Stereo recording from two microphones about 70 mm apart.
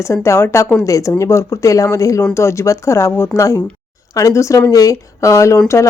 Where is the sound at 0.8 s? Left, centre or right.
Left.